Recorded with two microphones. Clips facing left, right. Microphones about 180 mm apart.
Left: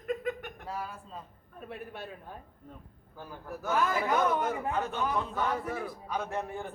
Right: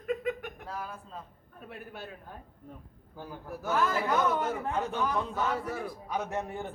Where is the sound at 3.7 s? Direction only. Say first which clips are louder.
Even; 15° left (ahead or behind).